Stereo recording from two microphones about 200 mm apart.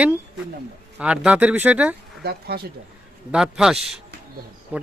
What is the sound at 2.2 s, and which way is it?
Speech, 50° right (ahead or behind).